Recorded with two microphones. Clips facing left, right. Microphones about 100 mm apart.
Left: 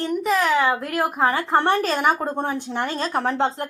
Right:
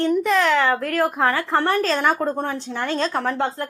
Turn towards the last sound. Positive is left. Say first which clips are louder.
# left 1 dB
turn(degrees=20)  # may be behind; listen again after turning